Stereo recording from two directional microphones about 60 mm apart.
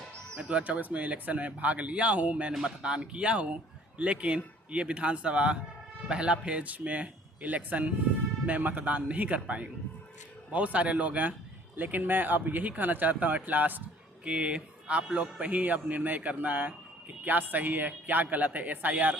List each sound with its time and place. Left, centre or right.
0.3 s speech: right
2.5 s speech: centre
2.8 s speech: centre
14.3 s speech: centre